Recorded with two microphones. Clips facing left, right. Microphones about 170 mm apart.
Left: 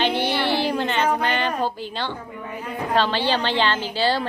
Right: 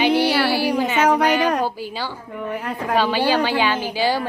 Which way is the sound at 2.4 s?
80° right.